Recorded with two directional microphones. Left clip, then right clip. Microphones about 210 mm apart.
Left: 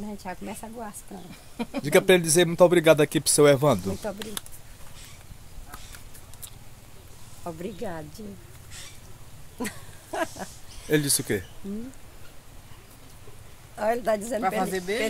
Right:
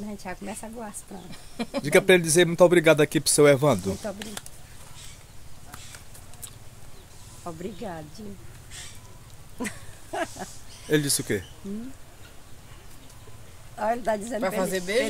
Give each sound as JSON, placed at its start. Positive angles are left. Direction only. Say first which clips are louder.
{"t": 0.2, "sound": "speech", "louder": "even", "side_deg": 10}
{"t": 1.8, "sound": "speech", "louder": "right 1 dB", "side_deg": 0}
{"t": 4.0, "sound": "speech", "louder": "left 1 dB", "side_deg": 25}
{"t": 7.4, "sound": "a woman's voice", "louder": "left 1 dB", "side_deg": 40}
{"t": 9.6, "sound": "speech", "louder": "even", "side_deg": 15}
{"t": 10.1, "sound": "speech", "louder": "left 1 dB", "side_deg": 30}
{"t": 10.9, "sound": "speech", "louder": "even", "side_deg": 5}
{"t": 13.7, "sound": "a woman's voice", "louder": "left 1 dB", "side_deg": 40}
{"t": 14.6, "sound": "speech", "louder": "even", "side_deg": -40}